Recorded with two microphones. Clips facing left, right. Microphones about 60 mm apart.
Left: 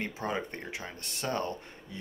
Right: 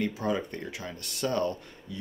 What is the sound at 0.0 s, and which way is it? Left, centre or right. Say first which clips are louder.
Speech: right 4 dB; left.